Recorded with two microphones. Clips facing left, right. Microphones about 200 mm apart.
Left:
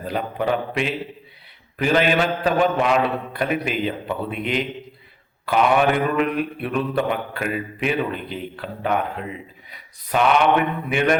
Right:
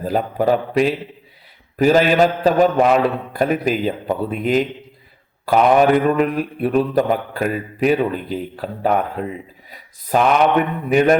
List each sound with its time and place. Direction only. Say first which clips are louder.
0.0 s mantra: right 5 dB; 40° right (ahead or behind)